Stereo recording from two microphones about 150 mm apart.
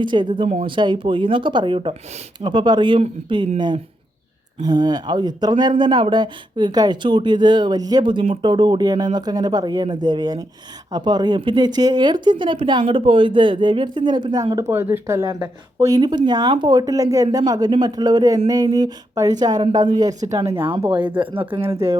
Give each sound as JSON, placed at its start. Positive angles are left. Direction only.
{"t": 0.0, "sound": "speech", "side_deg": -30}
{"t": 0.4, "sound": "speech", "side_deg": -45}
{"t": 0.8, "sound": "speech", "side_deg": -30}
{"t": 4.6, "sound": "speech", "side_deg": -25}
{"t": 16.0, "sound": "speech", "side_deg": -30}
{"t": 21.3, "sound": "speech", "side_deg": -35}